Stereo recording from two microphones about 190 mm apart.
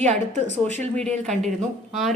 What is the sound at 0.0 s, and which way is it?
Speech, 35° right (ahead or behind).